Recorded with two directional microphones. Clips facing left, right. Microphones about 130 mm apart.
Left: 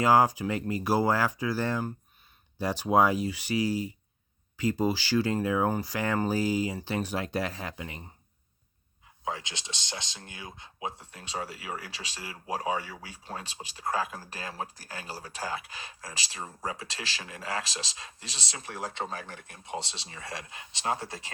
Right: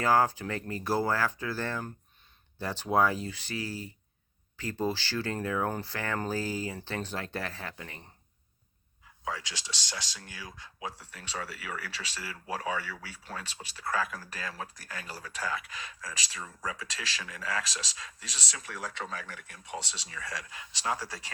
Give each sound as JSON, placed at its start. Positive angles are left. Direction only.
{"t": 0.0, "sound": "speech", "side_deg": 15}
{"t": 9.2, "sound": "speech", "side_deg": 20}